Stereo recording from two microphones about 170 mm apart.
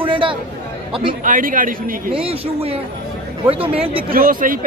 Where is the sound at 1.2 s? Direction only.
50° right (ahead or behind).